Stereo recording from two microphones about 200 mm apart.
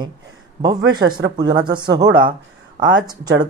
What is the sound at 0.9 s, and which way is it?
Speech, 20° right (ahead or behind).